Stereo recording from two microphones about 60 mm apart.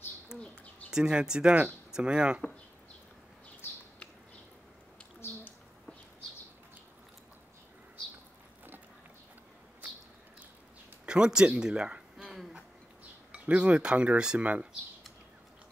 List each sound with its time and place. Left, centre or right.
0.3 s bird: centre
0.8 s speech: centre
3.6 s bird: left
11.1 s speech: centre
12.2 s a sound: centre
13.3 s speech: centre